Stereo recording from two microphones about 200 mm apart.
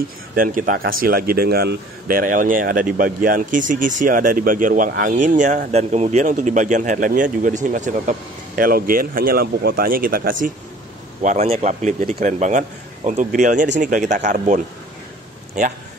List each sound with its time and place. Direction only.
0.4 s speech: 45° right (ahead or behind)
11.2 s speech: 30° right (ahead or behind)